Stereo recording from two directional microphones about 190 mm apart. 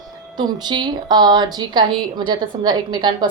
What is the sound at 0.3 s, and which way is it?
A woman's voice, 25° right (ahead or behind).